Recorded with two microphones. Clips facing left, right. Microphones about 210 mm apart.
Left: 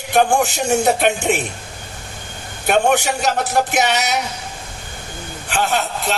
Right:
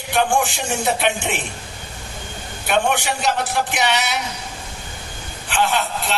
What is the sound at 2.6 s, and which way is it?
Speech, 45° left (ahead or behind).